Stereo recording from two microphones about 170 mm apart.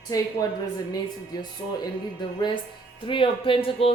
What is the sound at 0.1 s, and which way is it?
Speech, 20° left (ahead or behind).